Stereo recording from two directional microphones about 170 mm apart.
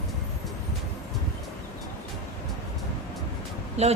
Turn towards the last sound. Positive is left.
turn(degrees=-40)  # may be behind; listen again after turning